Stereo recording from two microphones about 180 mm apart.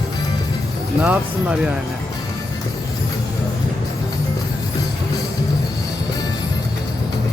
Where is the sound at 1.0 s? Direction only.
10° right (ahead or behind).